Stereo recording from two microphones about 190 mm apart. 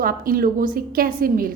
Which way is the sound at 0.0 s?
50° right (ahead or behind).